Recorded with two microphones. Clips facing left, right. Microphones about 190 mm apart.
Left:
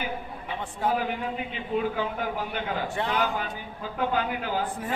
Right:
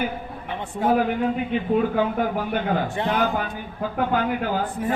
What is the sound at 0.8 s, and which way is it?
Speech, 50° right (ahead or behind).